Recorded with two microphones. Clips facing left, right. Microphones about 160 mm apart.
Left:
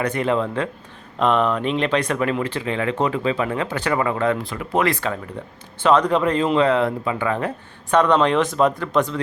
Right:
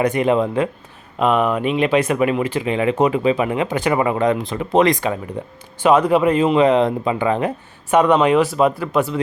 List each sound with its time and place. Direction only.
0.0 s speech: 15° right (ahead or behind)